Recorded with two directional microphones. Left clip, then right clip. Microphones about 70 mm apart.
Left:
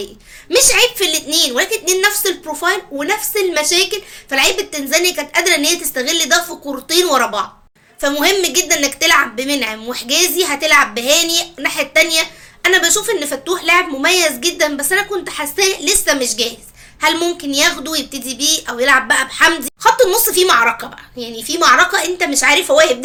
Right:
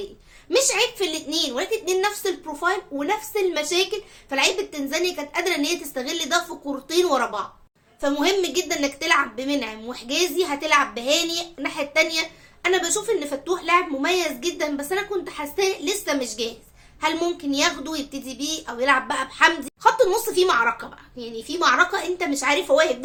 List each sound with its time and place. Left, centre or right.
0.5 s a woman's voice: right
2.6 s a woman's voice: right
4.3 s a woman's voice: right